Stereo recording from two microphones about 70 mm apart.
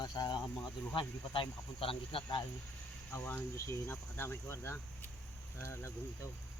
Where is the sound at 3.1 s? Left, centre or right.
Left.